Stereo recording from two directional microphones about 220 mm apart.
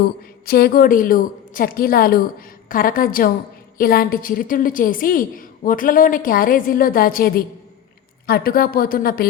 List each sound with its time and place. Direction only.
0.4 s a woman's voice: 45° left (ahead or behind)